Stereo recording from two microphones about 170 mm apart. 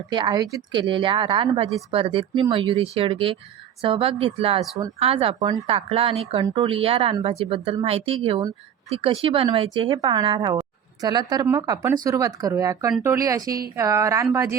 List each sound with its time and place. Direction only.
0.1 s speech: 25° right (ahead or behind)